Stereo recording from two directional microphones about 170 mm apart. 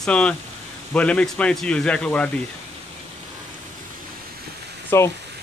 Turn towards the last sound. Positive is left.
turn(degrees=15)  # may be behind; listen again after turning